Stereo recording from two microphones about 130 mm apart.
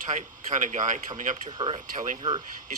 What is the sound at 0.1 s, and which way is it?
Speech, 70° right (ahead or behind).